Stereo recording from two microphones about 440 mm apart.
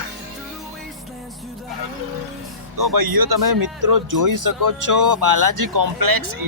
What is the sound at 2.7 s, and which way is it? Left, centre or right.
Speech, right.